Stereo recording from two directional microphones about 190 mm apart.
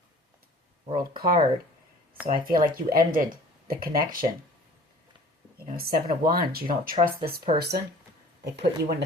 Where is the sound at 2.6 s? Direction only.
50° right (ahead or behind).